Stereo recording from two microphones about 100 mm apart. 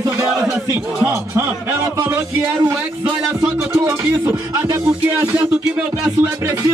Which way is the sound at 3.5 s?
25° right (ahead or behind).